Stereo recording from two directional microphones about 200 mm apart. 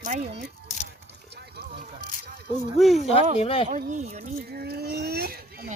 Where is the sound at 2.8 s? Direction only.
Centre (ahead or behind).